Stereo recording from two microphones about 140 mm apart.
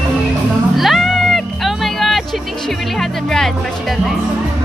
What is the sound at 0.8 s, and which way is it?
Music, centre (ahead or behind).